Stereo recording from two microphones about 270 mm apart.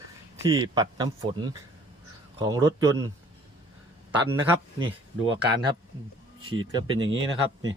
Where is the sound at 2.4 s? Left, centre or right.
Centre.